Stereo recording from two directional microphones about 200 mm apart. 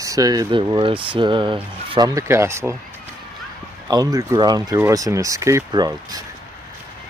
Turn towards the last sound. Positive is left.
turn(degrees=-20)  # may be behind; listen again after turning